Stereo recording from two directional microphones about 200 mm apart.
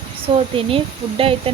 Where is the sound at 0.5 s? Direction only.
25° right (ahead or behind).